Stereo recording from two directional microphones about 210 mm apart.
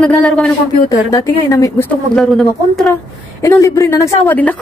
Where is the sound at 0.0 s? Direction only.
5° left (ahead or behind).